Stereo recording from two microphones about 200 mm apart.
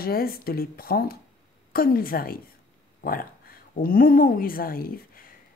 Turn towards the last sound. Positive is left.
turn(degrees=45)  # may be behind; listen again after turning